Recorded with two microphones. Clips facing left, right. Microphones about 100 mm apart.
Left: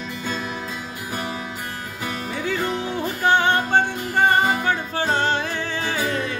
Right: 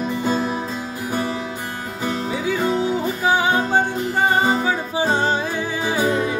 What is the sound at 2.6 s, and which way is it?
Music, 15° right (ahead or behind).